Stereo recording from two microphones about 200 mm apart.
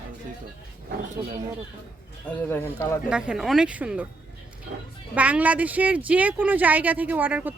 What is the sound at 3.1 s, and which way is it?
Speech, 5° right (ahead or behind).